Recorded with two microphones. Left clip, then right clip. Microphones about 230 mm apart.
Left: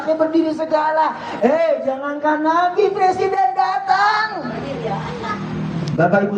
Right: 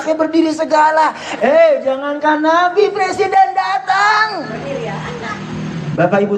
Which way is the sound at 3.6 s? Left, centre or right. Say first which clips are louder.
Right 2 dB; right.